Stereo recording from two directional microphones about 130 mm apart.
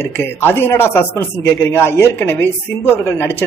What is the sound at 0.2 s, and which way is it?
A man's voice, 15° left (ahead or behind).